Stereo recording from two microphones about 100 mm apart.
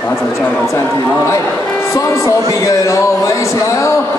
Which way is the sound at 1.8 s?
30° left (ahead or behind).